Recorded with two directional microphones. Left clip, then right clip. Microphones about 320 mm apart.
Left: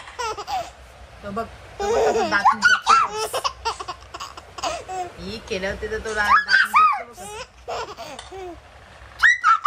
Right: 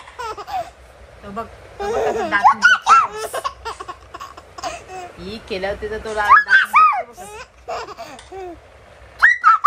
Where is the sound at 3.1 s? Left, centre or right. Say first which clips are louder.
Even; centre.